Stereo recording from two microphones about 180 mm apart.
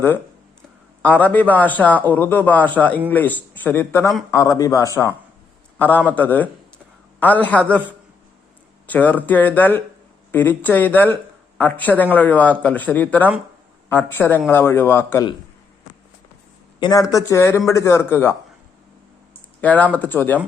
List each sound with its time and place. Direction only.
1.0 s a man's voice: 10° left (ahead or behind)
8.9 s a man's voice: 10° left (ahead or behind)
16.8 s a man's voice: 20° left (ahead or behind)
19.6 s a man's voice: 10° left (ahead or behind)